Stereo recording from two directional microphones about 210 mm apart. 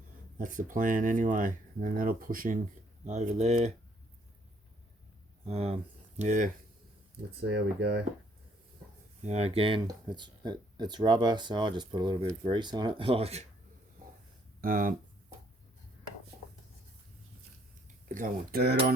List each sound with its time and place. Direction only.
0.3 s speech: 40° right (ahead or behind)
5.5 s speech: 30° right (ahead or behind)
7.3 s speech: 55° right (ahead or behind)
9.2 s speech: 30° right (ahead or behind)
14.6 s speech: 40° right (ahead or behind)
18.1 s speech: 45° right (ahead or behind)